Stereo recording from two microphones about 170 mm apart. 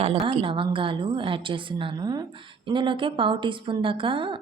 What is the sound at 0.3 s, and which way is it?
A woman's voice, 30° right (ahead or behind).